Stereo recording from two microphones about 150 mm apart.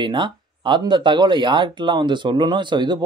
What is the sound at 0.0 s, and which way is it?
Speech, 30° right (ahead or behind).